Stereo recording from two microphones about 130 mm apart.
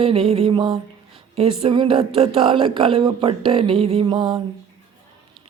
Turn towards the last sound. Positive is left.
turn(degrees=-35)  # may be behind; listen again after turning